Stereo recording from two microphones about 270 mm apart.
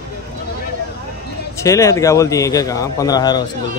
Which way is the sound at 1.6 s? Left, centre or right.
Centre.